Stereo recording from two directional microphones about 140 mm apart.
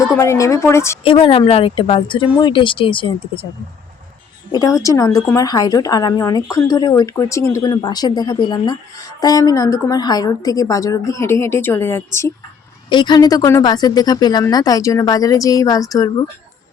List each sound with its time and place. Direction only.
0.2 s a woman's voice: 20° left (ahead or behind)
1.0 s speech: 40° left (ahead or behind)
4.5 s a woman's voice: 25° left (ahead or behind)
12.9 s a woman's voice: 35° left (ahead or behind)